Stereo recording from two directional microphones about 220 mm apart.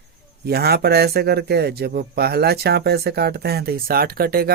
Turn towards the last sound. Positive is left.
turn(degrees=-40)  # may be behind; listen again after turning